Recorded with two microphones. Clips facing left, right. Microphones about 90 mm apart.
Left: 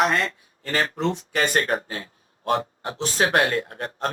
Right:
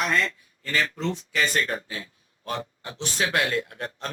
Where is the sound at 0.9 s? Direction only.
55° left (ahead or behind).